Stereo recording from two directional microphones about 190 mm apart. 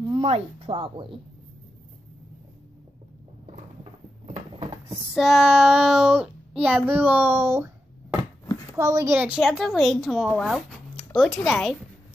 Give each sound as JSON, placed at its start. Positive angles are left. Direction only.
{"t": 0.0, "sound": "speech", "side_deg": -25}
{"t": 4.3, "sound": "a sound", "side_deg": -30}
{"t": 5.1, "sound": "child singing", "side_deg": 0}